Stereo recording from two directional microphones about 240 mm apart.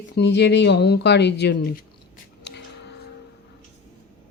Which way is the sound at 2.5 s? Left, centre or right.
Left.